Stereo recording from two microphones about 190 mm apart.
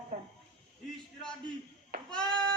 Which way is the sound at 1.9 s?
55° right (ahead or behind).